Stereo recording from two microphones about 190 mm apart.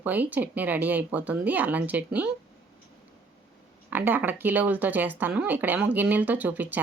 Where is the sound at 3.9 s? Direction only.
10° right (ahead or behind).